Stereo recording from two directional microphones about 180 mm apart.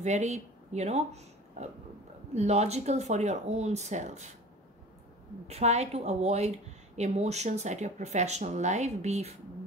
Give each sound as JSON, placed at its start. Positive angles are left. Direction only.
{"t": 0.0, "sound": "speech", "side_deg": -40}
{"t": 5.5, "sound": "speech", "side_deg": -35}